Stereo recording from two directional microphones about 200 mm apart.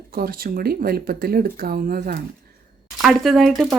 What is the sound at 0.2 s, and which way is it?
Speech, 45° right (ahead or behind).